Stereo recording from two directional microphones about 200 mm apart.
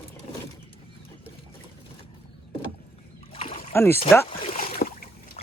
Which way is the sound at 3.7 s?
10° left (ahead or behind).